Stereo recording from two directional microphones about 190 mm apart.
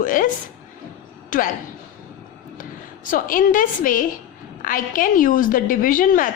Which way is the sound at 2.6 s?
45° left (ahead or behind).